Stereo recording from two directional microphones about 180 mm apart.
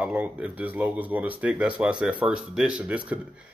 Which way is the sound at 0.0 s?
5° right (ahead or behind).